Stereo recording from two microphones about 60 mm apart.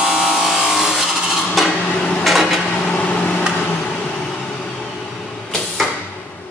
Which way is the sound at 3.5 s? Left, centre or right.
Centre.